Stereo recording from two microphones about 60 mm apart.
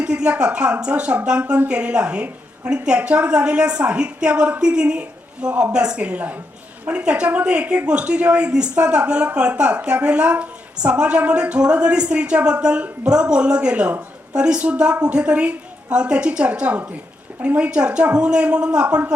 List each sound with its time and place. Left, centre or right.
0.0 s a woman's voice: centre